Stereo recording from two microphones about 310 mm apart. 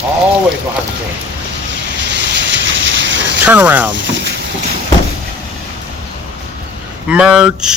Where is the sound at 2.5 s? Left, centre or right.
Right.